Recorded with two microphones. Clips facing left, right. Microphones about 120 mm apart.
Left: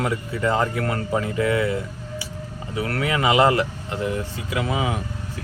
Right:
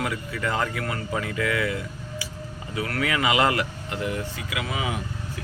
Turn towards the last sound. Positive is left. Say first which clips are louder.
# left 5 dB
turn(degrees=35)  # may be behind; listen again after turning